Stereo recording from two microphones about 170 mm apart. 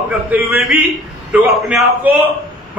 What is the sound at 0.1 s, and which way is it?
A man's voice, 10° right (ahead or behind).